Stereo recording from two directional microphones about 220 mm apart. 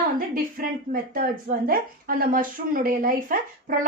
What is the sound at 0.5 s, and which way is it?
Speech, 40° right (ahead or behind).